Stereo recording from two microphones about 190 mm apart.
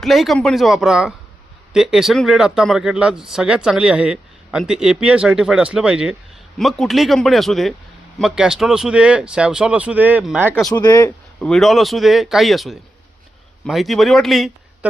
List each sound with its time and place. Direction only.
0.0 s speech: centre (ahead or behind)
10.5 s speech: 5° left (ahead or behind)
10.8 s speech: 20° left (ahead or behind)
11.3 s speech: 5° left (ahead or behind)